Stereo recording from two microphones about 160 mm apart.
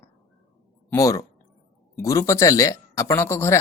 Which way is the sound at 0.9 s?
20° left (ahead or behind).